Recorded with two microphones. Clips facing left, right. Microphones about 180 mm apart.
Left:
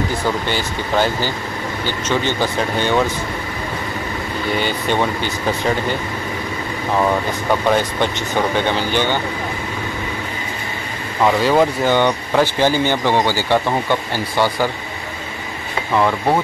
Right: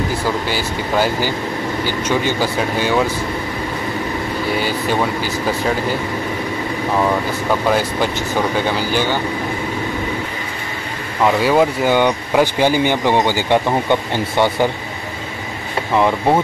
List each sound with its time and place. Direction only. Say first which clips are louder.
0.5 s speech: right 1 dB; 5° right (ahead or behind)
4.6 s speech: left 1 dB; 5° right (ahead or behind)
7.6 s speech: even; 5° right (ahead or behind)
11.2 s speech: even; 5° right (ahead or behind); by 14.7 s 20° right (ahead or behind)
15.9 s speech: right 1 dB; 15° right (ahead or behind)